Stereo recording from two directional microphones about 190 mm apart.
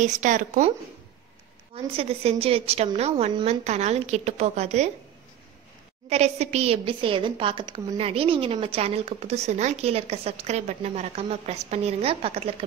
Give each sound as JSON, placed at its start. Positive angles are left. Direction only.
{"t": 0.0, "sound": "a woman's voice", "side_deg": -40}
{"t": 1.9, "sound": "a woman's voice", "side_deg": -30}
{"t": 6.0, "sound": "a woman's voice", "side_deg": -35}